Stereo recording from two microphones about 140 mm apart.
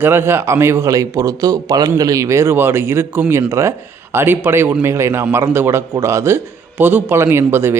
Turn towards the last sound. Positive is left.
turn(degrees=-15)  # may be behind; listen again after turning